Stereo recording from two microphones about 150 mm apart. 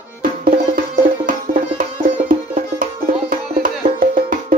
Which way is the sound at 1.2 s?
65° right (ahead or behind).